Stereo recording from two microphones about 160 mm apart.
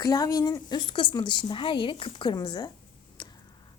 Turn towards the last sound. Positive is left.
turn(degrees=25)  # may be behind; listen again after turning